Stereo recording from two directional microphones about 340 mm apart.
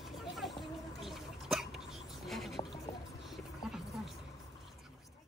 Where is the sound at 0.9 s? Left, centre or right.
Centre.